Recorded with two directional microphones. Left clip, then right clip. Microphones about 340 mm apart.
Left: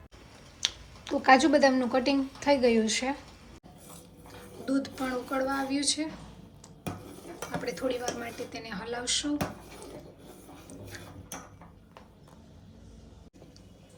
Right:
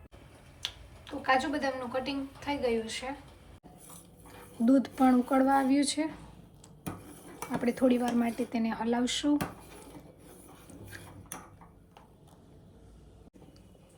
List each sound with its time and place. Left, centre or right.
0.6 s speech: centre
4.6 s speech: centre
7.6 s speech: centre